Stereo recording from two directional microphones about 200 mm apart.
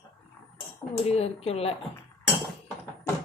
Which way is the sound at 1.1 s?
30° left (ahead or behind).